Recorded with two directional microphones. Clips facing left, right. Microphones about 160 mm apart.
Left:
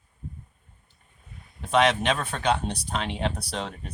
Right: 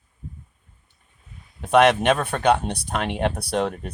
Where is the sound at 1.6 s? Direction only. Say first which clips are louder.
Right 6 dB; 55° right (ahead or behind).